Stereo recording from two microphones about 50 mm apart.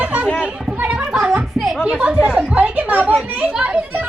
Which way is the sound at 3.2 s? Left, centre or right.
Right.